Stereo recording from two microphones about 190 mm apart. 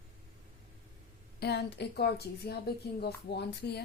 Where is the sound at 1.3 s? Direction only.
60° left (ahead or behind).